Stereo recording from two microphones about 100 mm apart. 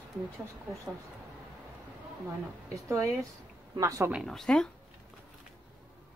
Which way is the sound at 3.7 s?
35° right (ahead or behind).